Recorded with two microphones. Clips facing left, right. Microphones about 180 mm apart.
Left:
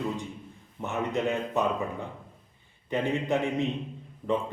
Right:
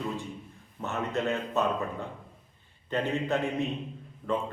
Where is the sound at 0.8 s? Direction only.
15° left (ahead or behind).